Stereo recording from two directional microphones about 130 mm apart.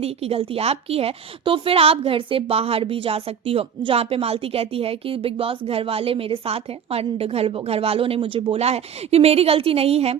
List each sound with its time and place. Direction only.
0.0 s a woman's voice: 50° right (ahead or behind)